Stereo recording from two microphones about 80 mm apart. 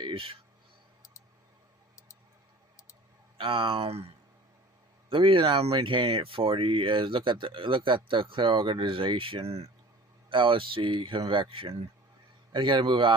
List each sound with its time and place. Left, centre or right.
0.0 s a sound: right
3.3 s speech: right
5.1 s speech: right